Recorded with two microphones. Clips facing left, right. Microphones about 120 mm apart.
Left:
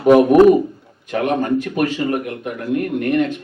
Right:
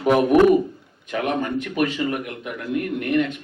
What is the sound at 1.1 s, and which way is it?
Speech, 35° left (ahead or behind).